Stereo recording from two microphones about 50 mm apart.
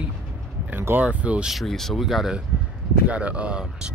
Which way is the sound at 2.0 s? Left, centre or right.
Centre.